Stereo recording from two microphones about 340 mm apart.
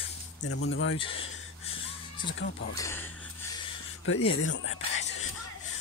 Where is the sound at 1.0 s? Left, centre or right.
Centre.